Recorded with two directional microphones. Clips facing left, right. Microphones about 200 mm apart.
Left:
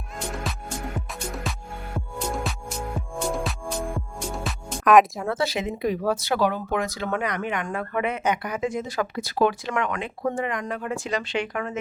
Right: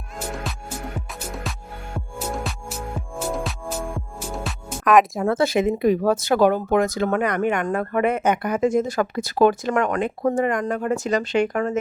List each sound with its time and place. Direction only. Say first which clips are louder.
0.5 s music: even; centre (ahead or behind)
5.2 s speech: right 7 dB; 50° right (ahead or behind)